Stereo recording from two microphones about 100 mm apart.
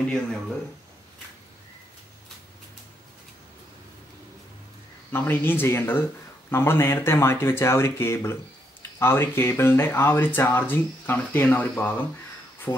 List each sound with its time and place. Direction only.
0.0 s speech: 5° left (ahead or behind)
5.1 s speech: 25° left (ahead or behind)